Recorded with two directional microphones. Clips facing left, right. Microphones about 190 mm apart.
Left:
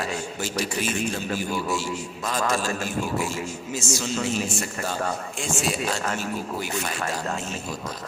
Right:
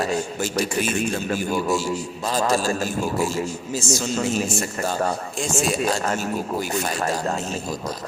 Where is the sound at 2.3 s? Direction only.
35° right (ahead or behind).